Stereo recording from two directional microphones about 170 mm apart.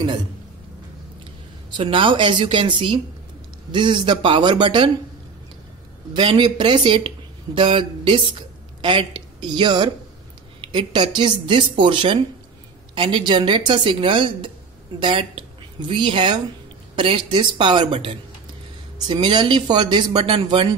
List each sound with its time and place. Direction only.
1.7 s speech: 30° right (ahead or behind)
6.1 s a woman's voice: 30° right (ahead or behind)